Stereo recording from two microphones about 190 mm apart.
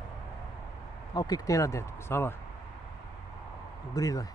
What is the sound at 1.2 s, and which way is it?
Speech, 20° left (ahead or behind).